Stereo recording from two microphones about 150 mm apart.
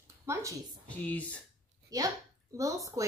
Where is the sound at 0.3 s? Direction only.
20° right (ahead or behind).